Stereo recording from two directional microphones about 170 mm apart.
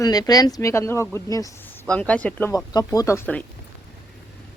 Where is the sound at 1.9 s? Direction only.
5° left (ahead or behind).